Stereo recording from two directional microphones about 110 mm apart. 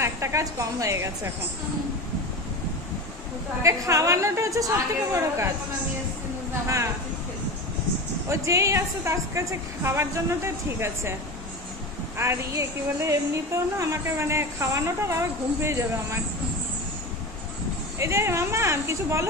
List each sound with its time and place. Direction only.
0.0 s a woman's voice: 25° right (ahead or behind)
3.6 s a woman's voice: 30° right (ahead or behind)
8.3 s a woman's voice: 30° right (ahead or behind)
12.2 s a woman's voice: 25° right (ahead or behind)
17.9 s a woman's voice: 25° right (ahead or behind)